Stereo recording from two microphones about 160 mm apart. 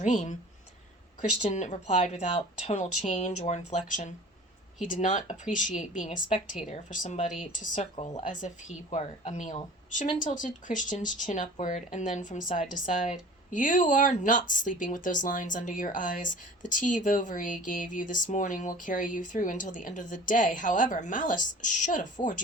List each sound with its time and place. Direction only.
0.0 s speech: 50° left (ahead or behind)
1.4 s speech: 45° left (ahead or behind)